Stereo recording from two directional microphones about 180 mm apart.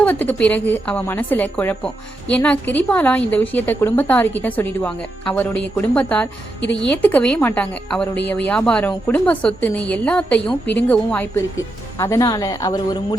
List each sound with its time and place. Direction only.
0.0 s a woman's voice: 10° left (ahead or behind)